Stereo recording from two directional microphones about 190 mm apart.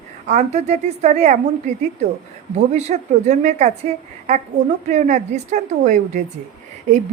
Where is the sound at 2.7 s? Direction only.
35° right (ahead or behind).